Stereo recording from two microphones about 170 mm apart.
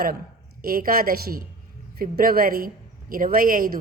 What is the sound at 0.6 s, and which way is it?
A woman's voice, 60° right (ahead or behind).